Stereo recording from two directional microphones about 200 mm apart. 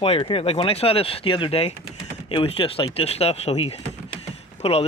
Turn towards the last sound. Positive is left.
turn(degrees=30)  # may be behind; listen again after turning